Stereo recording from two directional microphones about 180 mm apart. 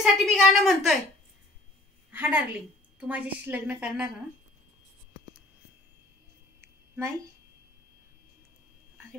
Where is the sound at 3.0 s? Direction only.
10° right (ahead or behind).